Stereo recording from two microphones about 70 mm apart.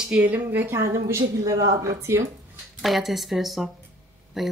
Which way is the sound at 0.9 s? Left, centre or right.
Right.